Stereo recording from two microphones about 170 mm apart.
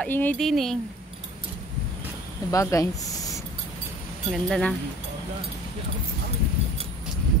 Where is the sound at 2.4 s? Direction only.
20° left (ahead or behind).